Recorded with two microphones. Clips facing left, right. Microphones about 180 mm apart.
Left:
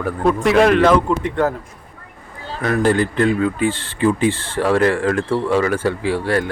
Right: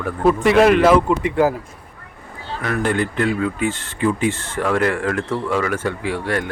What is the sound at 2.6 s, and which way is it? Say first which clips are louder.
Speech: left 4 dB; 35° left (ahead or behind).